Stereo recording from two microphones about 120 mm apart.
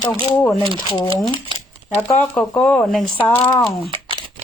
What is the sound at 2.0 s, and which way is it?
Speech, 15° left (ahead or behind).